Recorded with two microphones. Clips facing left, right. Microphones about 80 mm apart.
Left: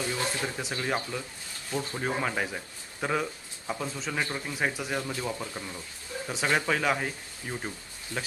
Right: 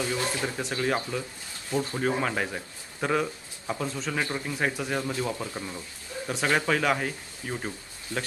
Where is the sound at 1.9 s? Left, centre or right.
Centre.